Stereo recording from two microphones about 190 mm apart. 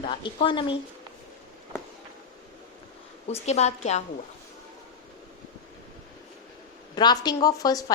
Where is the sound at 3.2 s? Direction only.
35° left (ahead or behind).